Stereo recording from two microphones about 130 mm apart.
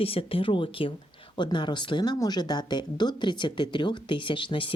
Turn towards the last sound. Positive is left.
turn(degrees=40)  # may be behind; listen again after turning